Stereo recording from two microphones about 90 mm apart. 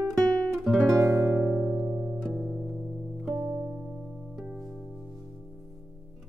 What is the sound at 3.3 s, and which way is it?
Music, 20° right (ahead or behind).